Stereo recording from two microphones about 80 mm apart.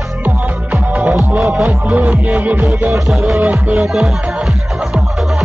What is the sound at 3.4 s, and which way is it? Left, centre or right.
Music, centre.